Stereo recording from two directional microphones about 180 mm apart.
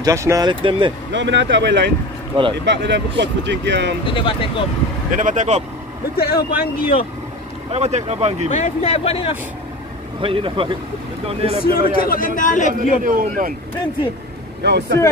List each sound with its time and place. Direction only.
0.0 s speech: 15° right (ahead or behind)
1.1 s speech: 80° right
4.0 s speech: 30° left (ahead or behind)
5.1 s speech: 45° right (ahead or behind)
6.1 s speech: 55° left (ahead or behind)
7.7 s speech: 35° right (ahead or behind)
8.5 s speech: 40° left (ahead or behind)
10.2 s speech: 30° right (ahead or behind)
11.6 s a man's voice: 55° left (ahead or behind)
13.0 s speech: 50° right (ahead or behind)
14.6 s speech: 70° right (ahead or behind)